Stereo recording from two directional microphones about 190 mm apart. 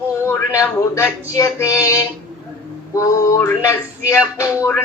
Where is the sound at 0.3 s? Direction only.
15° left (ahead or behind).